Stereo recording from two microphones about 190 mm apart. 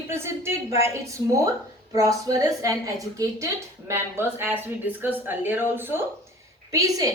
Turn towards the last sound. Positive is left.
turn(degrees=-15)  # may be behind; listen again after turning